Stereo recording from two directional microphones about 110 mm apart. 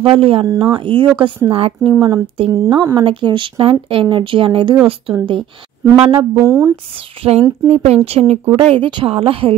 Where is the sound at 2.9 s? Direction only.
50° right (ahead or behind).